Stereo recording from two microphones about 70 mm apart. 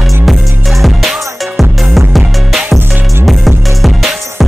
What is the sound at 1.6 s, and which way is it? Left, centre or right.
Music, centre.